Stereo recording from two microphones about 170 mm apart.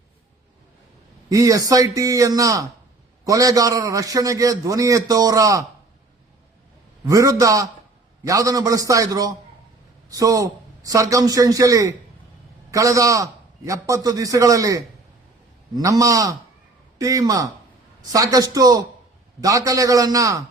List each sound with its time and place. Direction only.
1.3 s a man's voice: 20° right (ahead or behind)
7.0 s a man's voice: 20° right (ahead or behind)